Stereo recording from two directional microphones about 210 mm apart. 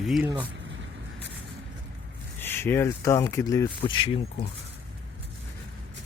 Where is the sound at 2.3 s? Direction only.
10° left (ahead or behind).